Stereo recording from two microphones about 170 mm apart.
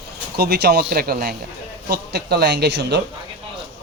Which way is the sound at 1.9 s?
75° right (ahead or behind).